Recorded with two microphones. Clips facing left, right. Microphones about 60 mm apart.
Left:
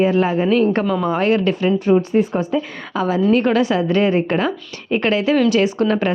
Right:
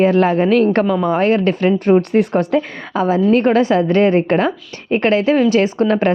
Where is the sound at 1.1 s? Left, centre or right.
Right.